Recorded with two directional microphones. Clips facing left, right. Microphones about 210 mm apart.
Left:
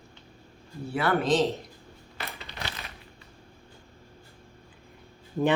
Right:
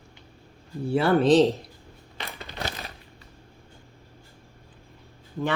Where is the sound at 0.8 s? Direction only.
30° right (ahead or behind).